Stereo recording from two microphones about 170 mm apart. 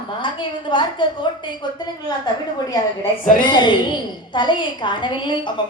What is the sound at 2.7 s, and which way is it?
A woman's voice, 20° left (ahead or behind).